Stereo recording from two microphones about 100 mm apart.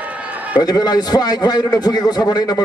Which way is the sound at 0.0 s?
15° right (ahead or behind).